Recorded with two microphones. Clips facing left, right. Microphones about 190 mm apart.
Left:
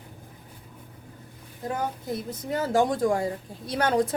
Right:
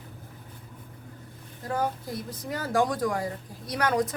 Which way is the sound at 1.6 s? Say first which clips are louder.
Even; 25° left (ahead or behind).